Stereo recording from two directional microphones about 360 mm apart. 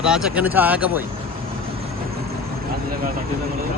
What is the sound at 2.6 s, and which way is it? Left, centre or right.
Vehicle, right.